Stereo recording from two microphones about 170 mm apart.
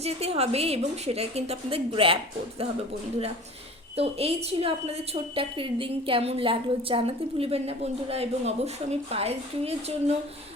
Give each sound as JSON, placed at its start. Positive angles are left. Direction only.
{"t": 0.0, "sound": "a woman's voice", "side_deg": -35}
{"t": 3.9, "sound": "a woman's voice", "side_deg": -35}